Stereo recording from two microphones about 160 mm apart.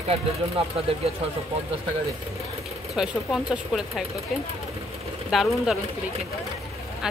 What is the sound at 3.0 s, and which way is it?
Speech, 5° right (ahead or behind).